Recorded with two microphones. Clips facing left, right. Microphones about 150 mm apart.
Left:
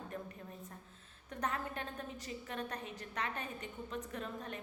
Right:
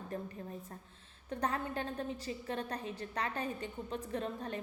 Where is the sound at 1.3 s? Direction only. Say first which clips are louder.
Right 4 dB; 30° right (ahead or behind).